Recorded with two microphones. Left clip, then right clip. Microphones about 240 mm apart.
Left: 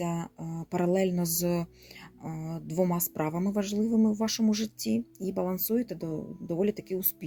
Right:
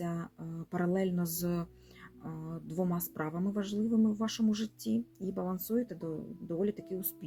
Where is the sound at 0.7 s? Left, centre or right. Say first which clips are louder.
Left 6 dB; left.